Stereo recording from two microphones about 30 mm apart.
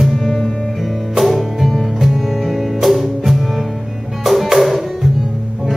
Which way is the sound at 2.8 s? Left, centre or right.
Centre.